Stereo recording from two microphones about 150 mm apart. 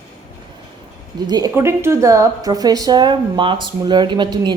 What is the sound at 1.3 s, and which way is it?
A woman's voice, 20° right (ahead or behind).